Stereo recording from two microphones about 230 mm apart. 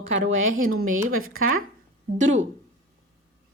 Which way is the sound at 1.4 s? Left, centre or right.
Right.